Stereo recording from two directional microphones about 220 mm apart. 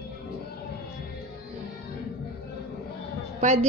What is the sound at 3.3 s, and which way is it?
Speech, 30° right (ahead or behind).